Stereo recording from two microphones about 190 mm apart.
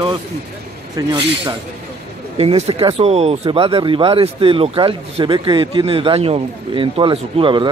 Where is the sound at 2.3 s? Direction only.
30° right (ahead or behind).